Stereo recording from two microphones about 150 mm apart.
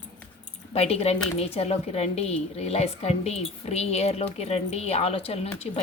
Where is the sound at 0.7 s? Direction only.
45° left (ahead or behind).